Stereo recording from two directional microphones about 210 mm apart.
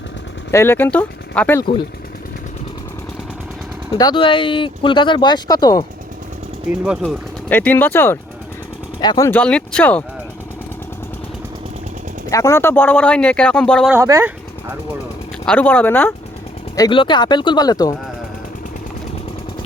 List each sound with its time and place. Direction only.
0.5 s speech: 10° left (ahead or behind)
3.9 s speech: 20° left (ahead or behind)
6.8 s speech: 5° right (ahead or behind)
7.5 s speech: 10° left (ahead or behind)
12.3 s speech: 15° left (ahead or behind)
13.9 s speech: 15° right (ahead or behind)
15.4 s speech: 5° left (ahead or behind)
16.7 s speech: 20° left (ahead or behind)